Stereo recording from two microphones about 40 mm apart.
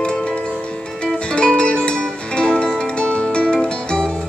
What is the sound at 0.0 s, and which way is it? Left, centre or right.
Music, left.